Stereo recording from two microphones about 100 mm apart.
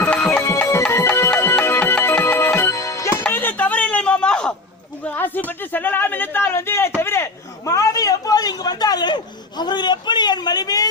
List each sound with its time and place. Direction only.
0.0 s music: 10° left (ahead or behind)
0.3 s music: 25° left (ahead or behind)
3.2 s a sound: 20° left (ahead or behind); by 10.8 s 40° left (ahead or behind)